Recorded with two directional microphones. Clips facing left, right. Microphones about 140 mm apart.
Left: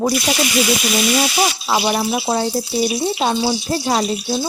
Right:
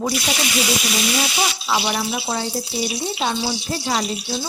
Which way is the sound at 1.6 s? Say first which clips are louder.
Left 4 dB; 40° left (ahead or behind).